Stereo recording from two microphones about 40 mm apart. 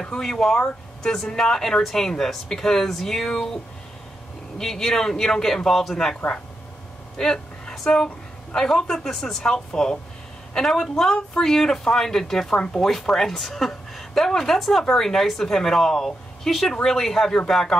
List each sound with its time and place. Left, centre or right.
0.2 s a woman's voice: centre
4.6 s a woman's voice: centre
7.2 s a sound: centre
7.7 s a woman's voice: centre